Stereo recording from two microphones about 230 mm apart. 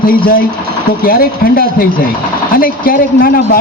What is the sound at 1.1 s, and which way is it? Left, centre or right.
A man's voice, left.